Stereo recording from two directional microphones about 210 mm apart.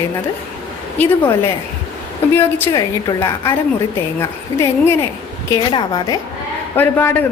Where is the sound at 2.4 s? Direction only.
10° left (ahead or behind).